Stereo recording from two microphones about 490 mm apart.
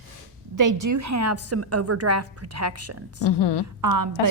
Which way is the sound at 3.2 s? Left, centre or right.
Left.